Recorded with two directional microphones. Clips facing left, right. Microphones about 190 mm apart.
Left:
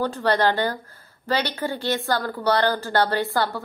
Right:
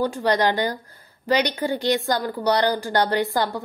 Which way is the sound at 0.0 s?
15° right (ahead or behind).